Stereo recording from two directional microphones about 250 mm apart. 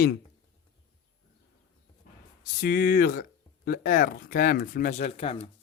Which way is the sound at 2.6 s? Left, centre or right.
Left.